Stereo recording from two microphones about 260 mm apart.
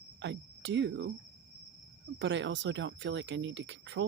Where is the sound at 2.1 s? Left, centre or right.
Right.